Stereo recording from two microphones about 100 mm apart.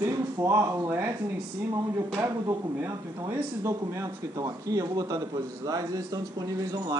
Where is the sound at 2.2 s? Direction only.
25° right (ahead or behind).